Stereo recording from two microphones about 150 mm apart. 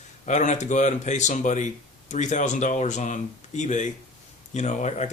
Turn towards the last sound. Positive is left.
turn(degrees=50)  # may be behind; listen again after turning